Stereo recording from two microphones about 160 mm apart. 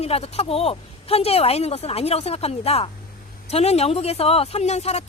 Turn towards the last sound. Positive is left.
turn(degrees=45)  # may be behind; listen again after turning